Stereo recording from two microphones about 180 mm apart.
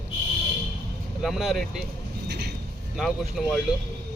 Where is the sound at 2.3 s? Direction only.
65° right (ahead or behind).